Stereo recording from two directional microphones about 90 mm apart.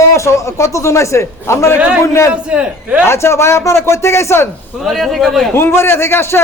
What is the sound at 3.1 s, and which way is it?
A man's voice, 30° left (ahead or behind).